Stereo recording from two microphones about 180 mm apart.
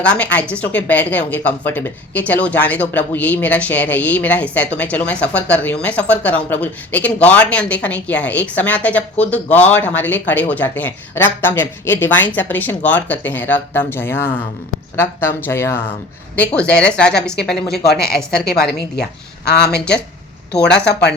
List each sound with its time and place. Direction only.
0.0 s speech: 5° left (ahead or behind)
18.4 s speech: 60° left (ahead or behind)